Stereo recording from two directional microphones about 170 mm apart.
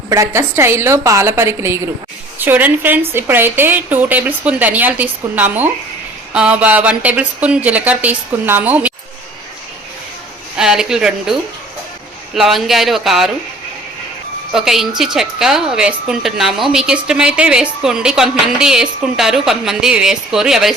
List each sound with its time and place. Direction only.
0.1 s speech: 15° right (ahead or behind)
10.6 s a woman's voice: 5° right (ahead or behind)
14.5 s a woman's voice: centre (ahead or behind)